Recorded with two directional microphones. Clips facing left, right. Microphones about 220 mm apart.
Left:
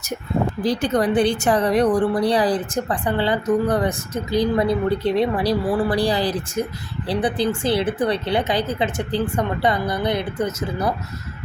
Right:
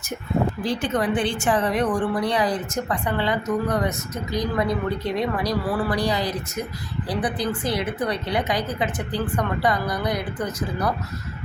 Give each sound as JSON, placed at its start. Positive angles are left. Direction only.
{"t": 0.6, "sound": "a woman's voice", "side_deg": 40}